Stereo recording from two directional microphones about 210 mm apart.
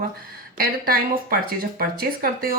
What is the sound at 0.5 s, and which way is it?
A woman's voice, 45° right (ahead or behind).